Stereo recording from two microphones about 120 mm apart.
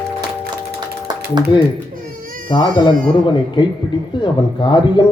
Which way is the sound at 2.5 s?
35° left (ahead or behind).